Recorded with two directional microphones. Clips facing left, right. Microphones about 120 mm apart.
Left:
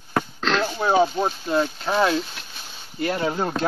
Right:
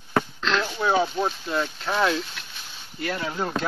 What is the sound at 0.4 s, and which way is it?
Wild animals, 40° left (ahead or behind).